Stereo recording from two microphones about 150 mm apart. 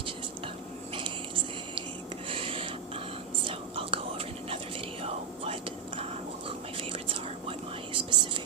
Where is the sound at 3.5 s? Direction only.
40° right (ahead or behind).